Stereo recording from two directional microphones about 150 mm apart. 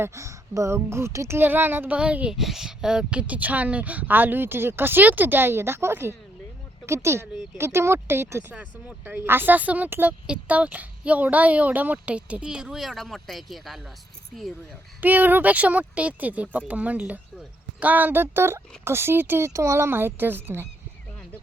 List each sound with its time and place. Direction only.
0.0 s speech: 20° right (ahead or behind); by 13.8 s centre (ahead or behind)
15.0 s speech: 10° right (ahead or behind)